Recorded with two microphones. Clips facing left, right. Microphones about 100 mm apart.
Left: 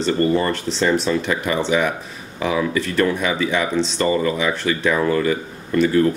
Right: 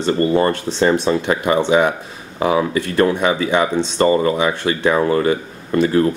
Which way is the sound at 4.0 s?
35° right (ahead or behind).